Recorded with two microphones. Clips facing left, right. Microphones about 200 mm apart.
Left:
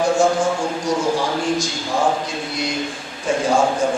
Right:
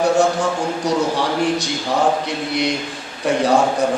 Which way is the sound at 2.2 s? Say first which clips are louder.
Right 4 dB; 65° right (ahead or behind).